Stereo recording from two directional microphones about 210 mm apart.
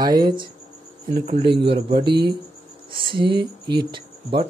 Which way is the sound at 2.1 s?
20° right (ahead or behind).